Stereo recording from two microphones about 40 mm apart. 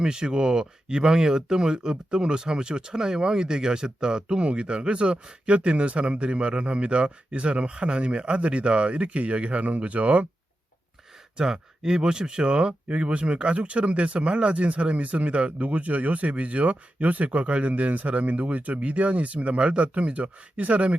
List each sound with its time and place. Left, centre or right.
0.0 s speech: centre; by 10.2 s right
11.3 s speech: centre; by 20.9 s right